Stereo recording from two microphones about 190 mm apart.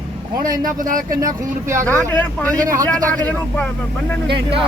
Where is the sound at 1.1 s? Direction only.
20° right (ahead or behind).